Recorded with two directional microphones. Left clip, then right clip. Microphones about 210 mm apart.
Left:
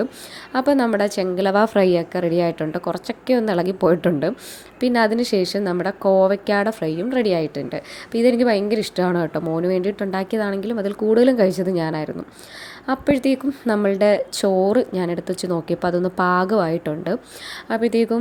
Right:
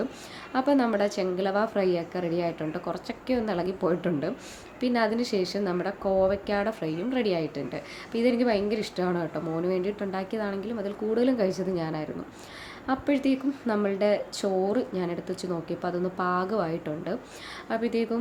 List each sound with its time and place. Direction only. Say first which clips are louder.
0.5 s a woman's voice: left 6 dB; 35° left (ahead or behind)